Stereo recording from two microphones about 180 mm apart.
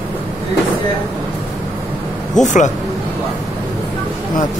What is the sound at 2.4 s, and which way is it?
Speech, 40° left (ahead or behind).